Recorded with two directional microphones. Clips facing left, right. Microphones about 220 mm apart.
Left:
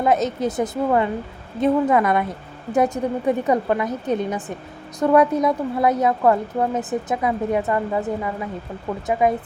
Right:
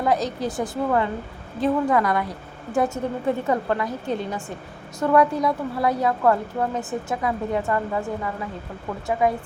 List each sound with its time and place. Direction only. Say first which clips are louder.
0.0 s a woman's voice: left 3 dB; 20° left (ahead or behind)